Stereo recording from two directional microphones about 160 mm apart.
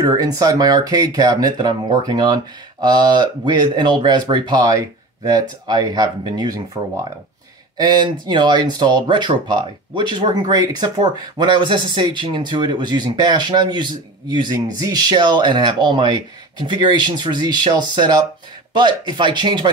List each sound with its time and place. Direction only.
0.0 s speech: 25° right (ahead or behind)